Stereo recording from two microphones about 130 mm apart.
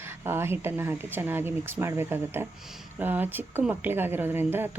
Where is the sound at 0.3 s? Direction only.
20° right (ahead or behind).